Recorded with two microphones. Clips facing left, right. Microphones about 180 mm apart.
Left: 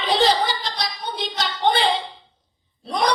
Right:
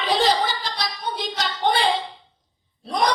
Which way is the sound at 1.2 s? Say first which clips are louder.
Left 2 dB; 45° right (ahead or behind).